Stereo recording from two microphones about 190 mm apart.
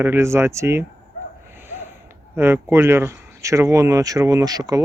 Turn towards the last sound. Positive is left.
turn(degrees=-20)  # may be behind; listen again after turning